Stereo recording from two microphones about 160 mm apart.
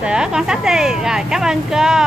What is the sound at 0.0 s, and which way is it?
Speech, 5° right (ahead or behind).